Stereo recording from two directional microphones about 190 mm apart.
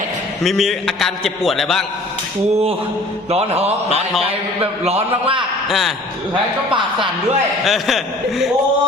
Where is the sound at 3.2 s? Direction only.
35° right (ahead or behind).